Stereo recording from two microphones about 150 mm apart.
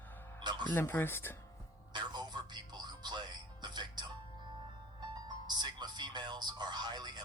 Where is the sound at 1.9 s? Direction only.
30° right (ahead or behind).